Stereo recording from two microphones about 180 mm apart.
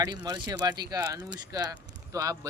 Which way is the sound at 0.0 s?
20° right (ahead or behind).